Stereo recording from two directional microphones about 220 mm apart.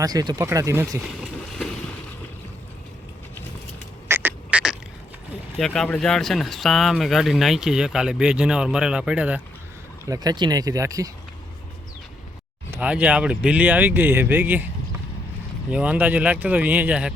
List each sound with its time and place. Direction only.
0.0 s speech: 15° right (ahead or behind)
4.1 s duck: 10° right (ahead or behind)
5.5 s speech: centre (ahead or behind)
10.1 s speech: 20° right (ahead or behind)
12.7 s speech: 5° right (ahead or behind)
15.7 s speech: 5° right (ahead or behind)